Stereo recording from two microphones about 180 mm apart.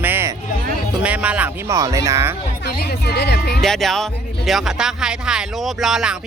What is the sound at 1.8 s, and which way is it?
Speech, 20° right (ahead or behind).